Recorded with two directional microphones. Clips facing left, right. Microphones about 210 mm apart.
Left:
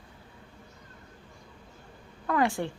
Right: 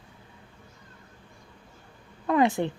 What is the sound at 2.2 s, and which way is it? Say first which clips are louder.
Speech: right 4 dB; 20° right (ahead or behind).